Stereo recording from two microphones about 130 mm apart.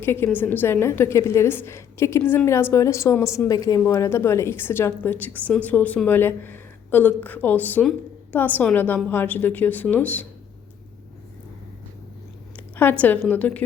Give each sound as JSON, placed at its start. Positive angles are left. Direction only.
{"t": 0.0, "sound": "a woman's voice", "side_deg": 20}
{"t": 12.5, "sound": "a woman's voice", "side_deg": 15}